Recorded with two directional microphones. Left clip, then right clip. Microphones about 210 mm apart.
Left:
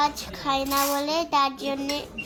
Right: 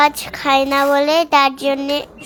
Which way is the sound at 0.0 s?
30° right (ahead or behind).